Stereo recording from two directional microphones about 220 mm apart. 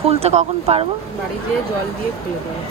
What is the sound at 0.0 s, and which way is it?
Speech, 25° right (ahead or behind).